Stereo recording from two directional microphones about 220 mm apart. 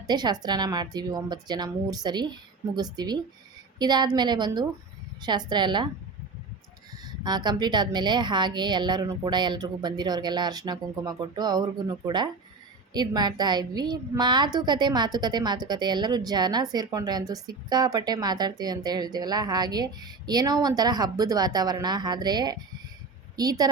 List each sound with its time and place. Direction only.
0.1 s a woman's voice: 20° right (ahead or behind)
7.1 s a woman's voice: 20° right (ahead or behind)